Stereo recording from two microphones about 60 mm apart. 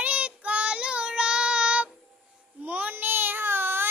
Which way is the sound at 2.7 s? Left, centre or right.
Right.